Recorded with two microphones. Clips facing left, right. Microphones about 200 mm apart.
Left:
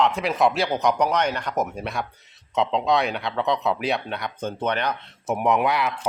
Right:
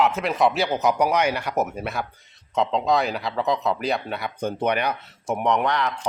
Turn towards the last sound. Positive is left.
turn(degrees=10)  # may be behind; listen again after turning